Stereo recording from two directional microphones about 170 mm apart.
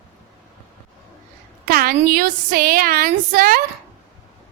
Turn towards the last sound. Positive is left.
turn(degrees=-55)  # may be behind; listen again after turning